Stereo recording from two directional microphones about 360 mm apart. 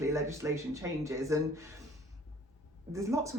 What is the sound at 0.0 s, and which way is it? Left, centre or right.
Speech, centre.